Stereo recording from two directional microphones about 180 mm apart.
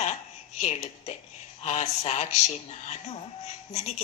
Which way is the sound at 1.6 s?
40° left (ahead or behind).